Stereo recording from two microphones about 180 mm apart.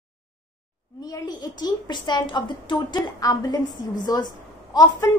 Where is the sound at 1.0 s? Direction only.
20° left (ahead or behind).